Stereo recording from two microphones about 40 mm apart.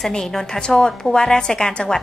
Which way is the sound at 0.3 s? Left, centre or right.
Centre.